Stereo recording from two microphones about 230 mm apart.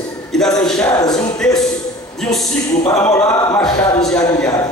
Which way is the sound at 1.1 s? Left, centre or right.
Centre.